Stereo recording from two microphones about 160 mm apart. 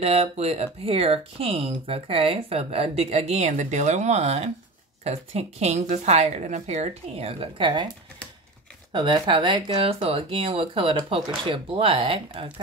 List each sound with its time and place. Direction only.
0.0 s speech: 40° right (ahead or behind)
8.9 s speech: 30° right (ahead or behind)